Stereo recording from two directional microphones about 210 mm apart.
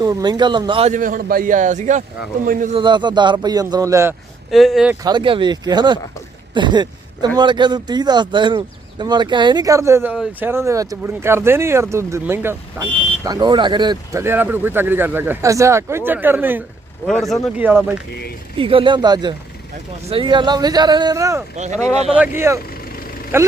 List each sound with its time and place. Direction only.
0.0 s speech: 20° right (ahead or behind)
0.9 s a man's voice: 40° right (ahead or behind)
2.7 s speech: 20° right (ahead or behind)
4.5 s speech: centre (ahead or behind)
5.0 s speech: 25° right (ahead or behind)
6.5 s a sound: 20° right (ahead or behind)
7.3 s speech: 20° right (ahead or behind)
17.1 s speech: centre (ahead or behind)
18.5 s speech: 25° right (ahead or behind)
21.5 s a man's voice: 35° right (ahead or behind)
22.4 s speech: 15° right (ahead or behind)